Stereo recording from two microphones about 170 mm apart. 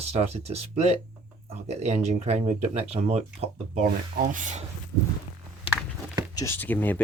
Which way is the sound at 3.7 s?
50° right (ahead or behind).